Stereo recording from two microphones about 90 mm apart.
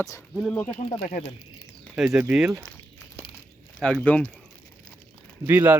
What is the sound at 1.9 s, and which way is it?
Speech, 5° right (ahead or behind).